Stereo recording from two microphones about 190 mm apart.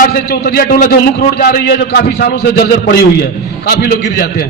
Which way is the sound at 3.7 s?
55° left (ahead or behind).